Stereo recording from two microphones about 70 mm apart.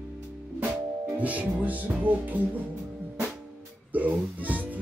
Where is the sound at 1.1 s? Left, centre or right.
Right.